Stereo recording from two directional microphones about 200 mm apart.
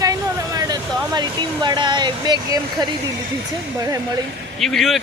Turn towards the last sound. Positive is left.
turn(degrees=0)  # may be behind; listen again after turning